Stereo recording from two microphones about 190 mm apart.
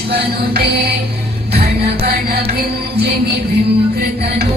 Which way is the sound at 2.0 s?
55° right (ahead or behind).